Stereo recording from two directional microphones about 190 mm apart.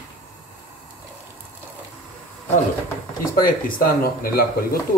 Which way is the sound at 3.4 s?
50° left (ahead or behind).